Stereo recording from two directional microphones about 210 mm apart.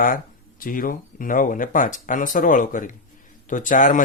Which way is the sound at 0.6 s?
40° left (ahead or behind).